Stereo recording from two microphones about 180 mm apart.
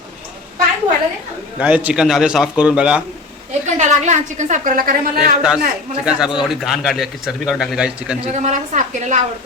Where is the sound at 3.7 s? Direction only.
40° right (ahead or behind).